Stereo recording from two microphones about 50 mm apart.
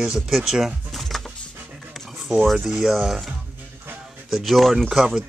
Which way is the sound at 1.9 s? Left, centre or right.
Centre.